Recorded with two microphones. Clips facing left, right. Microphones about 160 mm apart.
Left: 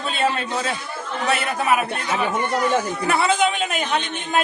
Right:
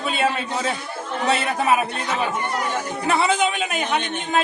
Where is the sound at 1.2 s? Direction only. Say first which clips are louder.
Right 1 dB; 20° right (ahead or behind).